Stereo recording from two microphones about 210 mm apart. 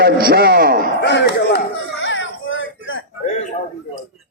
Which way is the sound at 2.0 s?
65° left (ahead or behind).